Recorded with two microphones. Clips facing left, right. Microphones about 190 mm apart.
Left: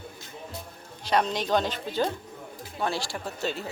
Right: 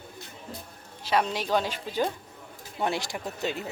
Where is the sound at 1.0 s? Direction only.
5° right (ahead or behind).